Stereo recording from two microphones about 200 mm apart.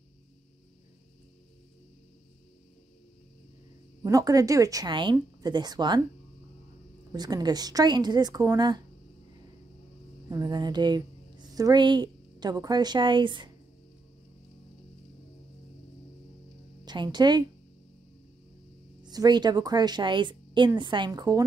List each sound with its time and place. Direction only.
4.0 s speech: 15° right (ahead or behind)
7.1 s a woman's voice: 20° right (ahead or behind)
10.3 s a woman's voice: 20° right (ahead or behind)
16.8 s a woman's voice: 20° right (ahead or behind)
19.0 s a woman's voice: 20° right (ahead or behind)